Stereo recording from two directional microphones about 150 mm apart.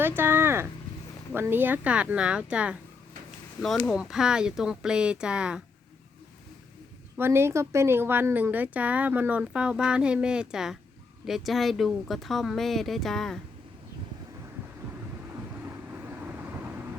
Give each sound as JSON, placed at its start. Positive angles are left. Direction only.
{"t": 0.2, "sound": "speech", "side_deg": -15}
{"t": 3.8, "sound": "speech", "side_deg": -5}
{"t": 7.2, "sound": "speech", "side_deg": -15}